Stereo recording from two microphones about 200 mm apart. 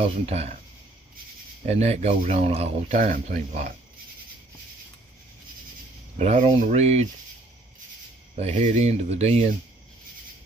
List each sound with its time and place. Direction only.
0.0 s speech: 30° right (ahead or behind)
1.7 s speech: 35° right (ahead or behind)
6.1 s speech: 30° right (ahead or behind)
8.4 s speech: 35° right (ahead or behind)